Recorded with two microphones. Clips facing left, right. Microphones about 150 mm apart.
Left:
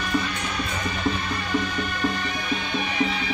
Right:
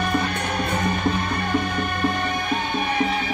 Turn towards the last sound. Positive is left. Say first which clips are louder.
# right 3 dB
turn(degrees=-50)  # may be behind; listen again after turning